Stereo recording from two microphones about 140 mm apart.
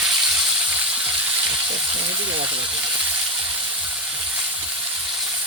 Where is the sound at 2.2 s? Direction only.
10° right (ahead or behind).